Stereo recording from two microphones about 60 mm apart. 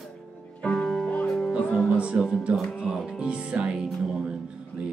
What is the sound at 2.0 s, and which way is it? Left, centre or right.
Music, centre.